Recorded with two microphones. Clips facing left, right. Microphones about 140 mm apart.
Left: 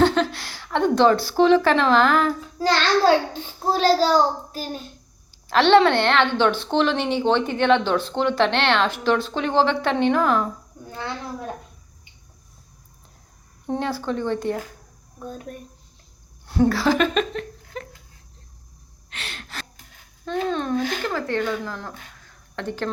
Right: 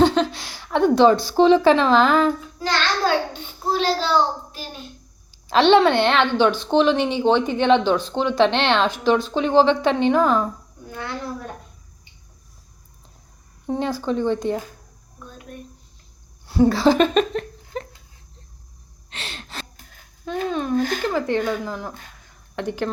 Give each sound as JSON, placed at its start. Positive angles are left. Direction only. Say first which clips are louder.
{"t": 0.0, "sound": "a woman's voice", "louder": "right 1 dB", "side_deg": -20}
{"t": 3.7, "sound": "a child's voice", "louder": "left 3 dB", "side_deg": 40}
{"t": 5.5, "sound": "a woman's voice", "louder": "right 1 dB", "side_deg": -15}
{"t": 13.7, "sound": "a woman's voice", "louder": "right 2 dB", "side_deg": -15}
{"t": 16.6, "sound": "speech", "louder": "right 4 dB", "side_deg": -25}
{"t": 19.1, "sound": "gasp", "louder": "right 1 dB", "side_deg": -25}
{"t": 20.2, "sound": "a woman's voice", "louder": "even", "side_deg": -5}